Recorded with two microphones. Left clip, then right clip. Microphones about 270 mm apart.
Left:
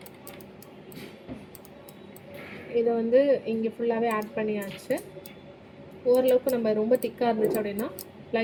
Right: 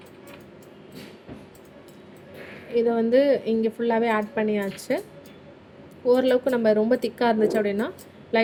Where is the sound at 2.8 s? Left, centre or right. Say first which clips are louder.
Right 2 dB; right.